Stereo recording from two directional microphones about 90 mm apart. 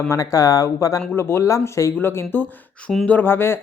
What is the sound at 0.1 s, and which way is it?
Speech, 40° left (ahead or behind).